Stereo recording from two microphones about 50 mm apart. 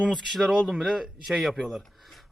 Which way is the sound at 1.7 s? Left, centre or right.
Centre.